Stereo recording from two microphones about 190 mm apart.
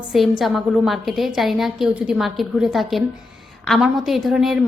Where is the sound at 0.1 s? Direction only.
Centre (ahead or behind).